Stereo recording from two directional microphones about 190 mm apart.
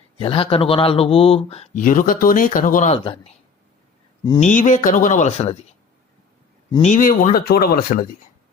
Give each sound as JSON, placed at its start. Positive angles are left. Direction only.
{"t": 0.2, "sound": "speech", "side_deg": 30}
{"t": 2.9, "sound": "speech", "side_deg": 30}
{"t": 4.4, "sound": "speech", "side_deg": 40}
{"t": 6.8, "sound": "speech", "side_deg": 45}